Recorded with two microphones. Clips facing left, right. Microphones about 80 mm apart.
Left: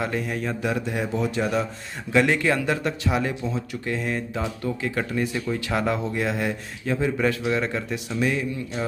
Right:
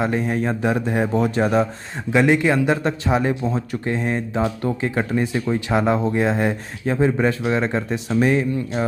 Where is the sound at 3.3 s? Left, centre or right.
Right.